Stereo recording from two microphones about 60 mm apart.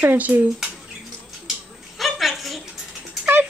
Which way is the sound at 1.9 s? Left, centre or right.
Centre.